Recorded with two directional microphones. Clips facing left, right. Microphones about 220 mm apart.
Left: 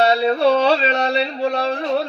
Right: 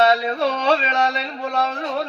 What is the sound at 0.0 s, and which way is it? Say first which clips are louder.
Yodeling: left 3 dB; 30° left (ahead or behind).